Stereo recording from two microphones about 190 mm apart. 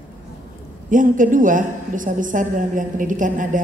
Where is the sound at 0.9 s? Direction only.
45° right (ahead or behind).